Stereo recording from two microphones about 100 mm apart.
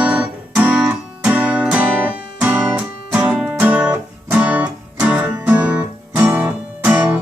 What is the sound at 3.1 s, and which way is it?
Music, 10° right (ahead or behind).